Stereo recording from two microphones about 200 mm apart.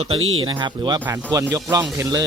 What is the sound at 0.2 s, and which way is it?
Speech, 90° right.